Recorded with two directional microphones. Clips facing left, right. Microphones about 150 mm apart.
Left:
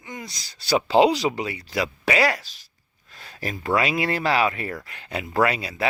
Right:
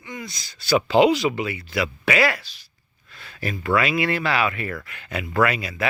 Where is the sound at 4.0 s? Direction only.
35° left (ahead or behind).